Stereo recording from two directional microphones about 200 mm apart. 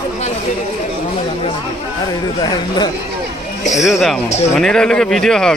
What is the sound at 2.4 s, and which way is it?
Speech, 20° left (ahead or behind).